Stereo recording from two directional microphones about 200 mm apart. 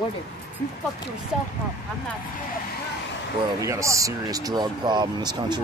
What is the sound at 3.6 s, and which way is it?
Speech, 15° right (ahead or behind).